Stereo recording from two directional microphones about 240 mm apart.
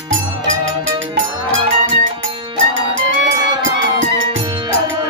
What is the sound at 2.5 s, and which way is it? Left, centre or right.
Music, right.